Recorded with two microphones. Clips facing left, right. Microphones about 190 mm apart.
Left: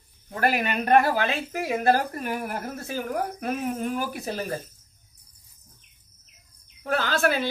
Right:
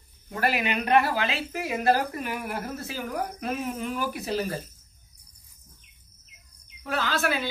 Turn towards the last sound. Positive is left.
turn(degrees=50)  # may be behind; listen again after turning